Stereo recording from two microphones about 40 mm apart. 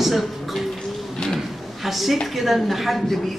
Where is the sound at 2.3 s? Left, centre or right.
Centre.